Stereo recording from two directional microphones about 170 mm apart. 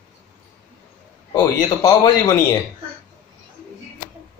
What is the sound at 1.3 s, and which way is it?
Speech, 20° left (ahead or behind).